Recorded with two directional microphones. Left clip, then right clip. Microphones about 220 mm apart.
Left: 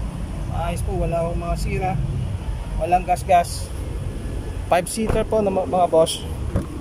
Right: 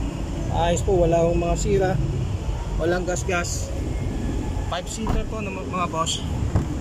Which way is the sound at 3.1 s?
15° left (ahead or behind).